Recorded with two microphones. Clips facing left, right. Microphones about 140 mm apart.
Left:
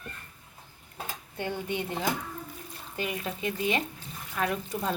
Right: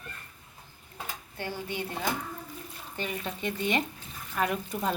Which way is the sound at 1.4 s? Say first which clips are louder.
Left 3 dB; 20° left (ahead or behind).